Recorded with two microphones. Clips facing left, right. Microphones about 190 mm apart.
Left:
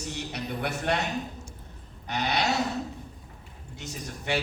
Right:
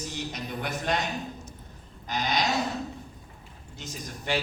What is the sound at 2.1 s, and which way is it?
Speech, 70° left (ahead or behind).